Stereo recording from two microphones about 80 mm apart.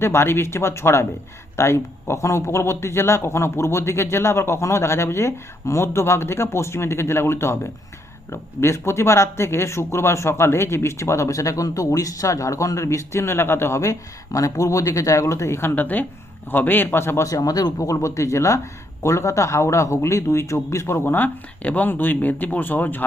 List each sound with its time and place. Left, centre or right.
0.0 s a man's voice: left
17.2 s speech: left